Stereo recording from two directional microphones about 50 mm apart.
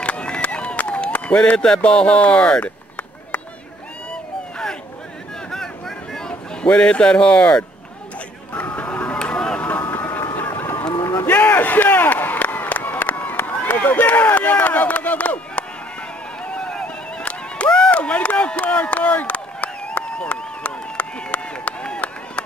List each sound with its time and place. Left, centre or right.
0.0 s run: left
1.8 s speech: left
4.1 s a sound: centre
8.5 s music: left
9.6 s vehicle: left
10.5 s run: left
11.2 s a sound: left